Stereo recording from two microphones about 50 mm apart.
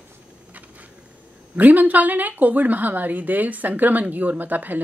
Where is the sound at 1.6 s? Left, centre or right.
Right.